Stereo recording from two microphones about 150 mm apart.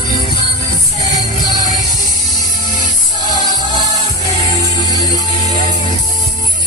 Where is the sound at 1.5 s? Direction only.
60° left (ahead or behind).